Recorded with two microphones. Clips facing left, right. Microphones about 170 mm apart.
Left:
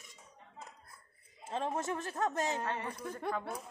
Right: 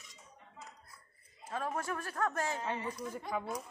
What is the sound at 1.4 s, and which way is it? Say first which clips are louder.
A woman's voice: left 2 dB; 25° left (ahead or behind).